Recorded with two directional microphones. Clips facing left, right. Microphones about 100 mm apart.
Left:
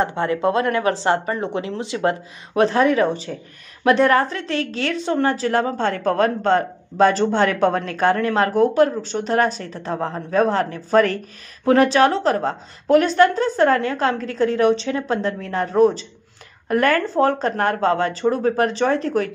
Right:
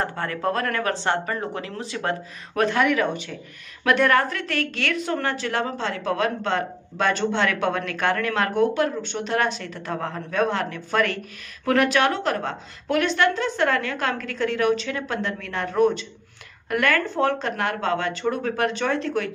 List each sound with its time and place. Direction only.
0.0 s speech: 25° left (ahead or behind)